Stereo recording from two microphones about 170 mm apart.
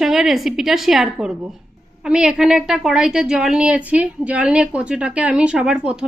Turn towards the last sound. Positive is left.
turn(degrees=-5)  # may be behind; listen again after turning